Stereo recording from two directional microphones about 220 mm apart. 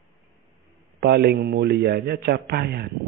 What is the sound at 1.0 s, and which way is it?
A man's voice, 50° right (ahead or behind).